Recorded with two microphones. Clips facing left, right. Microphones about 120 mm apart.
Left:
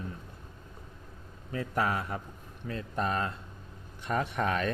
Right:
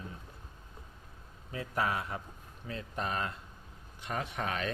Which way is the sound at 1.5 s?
45° left (ahead or behind).